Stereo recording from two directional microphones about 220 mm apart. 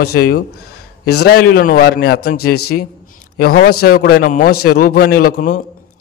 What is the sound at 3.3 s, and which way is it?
A man's voice, 45° left (ahead or behind).